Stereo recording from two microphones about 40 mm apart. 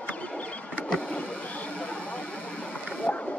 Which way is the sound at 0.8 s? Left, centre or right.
Centre.